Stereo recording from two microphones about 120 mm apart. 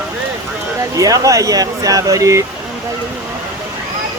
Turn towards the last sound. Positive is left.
turn(degrees=-30)  # may be behind; listen again after turning